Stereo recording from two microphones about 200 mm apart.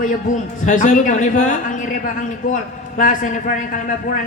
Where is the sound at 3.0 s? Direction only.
40° left (ahead or behind).